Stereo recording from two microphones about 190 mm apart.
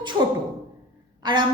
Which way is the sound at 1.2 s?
20° right (ahead or behind).